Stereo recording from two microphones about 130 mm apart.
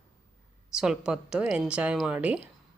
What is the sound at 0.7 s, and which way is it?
Speech, 5° right (ahead or behind).